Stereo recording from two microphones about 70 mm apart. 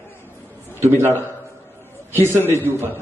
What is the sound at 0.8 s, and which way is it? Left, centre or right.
A man's voice, right.